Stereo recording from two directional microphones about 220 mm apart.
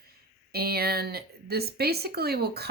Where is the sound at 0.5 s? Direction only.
45° right (ahead or behind).